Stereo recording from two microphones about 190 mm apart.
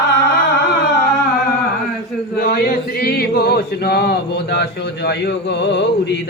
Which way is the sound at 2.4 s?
50° left (ahead or behind).